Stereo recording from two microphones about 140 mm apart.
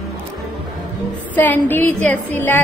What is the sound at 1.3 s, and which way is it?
A woman's voice, 15° left (ahead or behind).